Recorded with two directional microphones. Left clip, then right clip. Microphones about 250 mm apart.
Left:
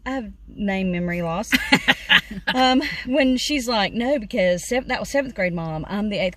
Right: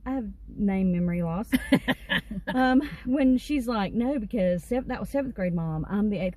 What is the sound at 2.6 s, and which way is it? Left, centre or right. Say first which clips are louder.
Speech: left 5 dB; centre.